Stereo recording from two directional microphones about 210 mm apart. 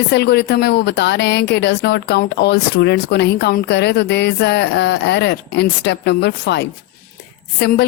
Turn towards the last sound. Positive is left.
turn(degrees=50)  # may be behind; listen again after turning